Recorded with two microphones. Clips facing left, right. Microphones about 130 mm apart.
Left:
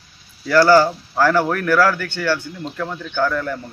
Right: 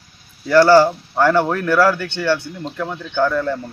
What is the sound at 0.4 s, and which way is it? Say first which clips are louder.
Speech: right 2 dB; 20° right (ahead or behind).